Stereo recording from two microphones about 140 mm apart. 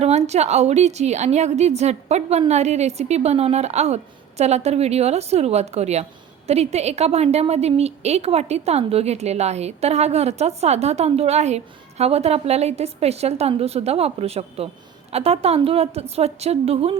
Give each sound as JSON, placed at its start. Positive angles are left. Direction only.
{"t": 0.0, "sound": "a woman's voice", "side_deg": -50}